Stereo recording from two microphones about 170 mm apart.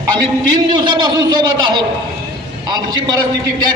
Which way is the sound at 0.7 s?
25° right (ahead or behind).